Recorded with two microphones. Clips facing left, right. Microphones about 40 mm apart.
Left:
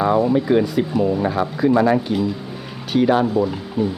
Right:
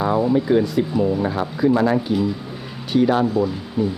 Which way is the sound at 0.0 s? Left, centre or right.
Centre.